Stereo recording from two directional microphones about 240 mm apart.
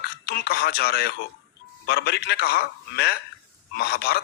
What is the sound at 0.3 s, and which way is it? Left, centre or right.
A man's voice, left.